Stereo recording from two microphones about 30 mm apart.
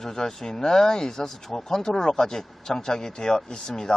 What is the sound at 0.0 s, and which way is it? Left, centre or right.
Speech, centre.